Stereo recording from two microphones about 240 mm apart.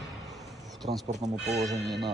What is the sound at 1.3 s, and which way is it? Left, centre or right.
Speech, centre.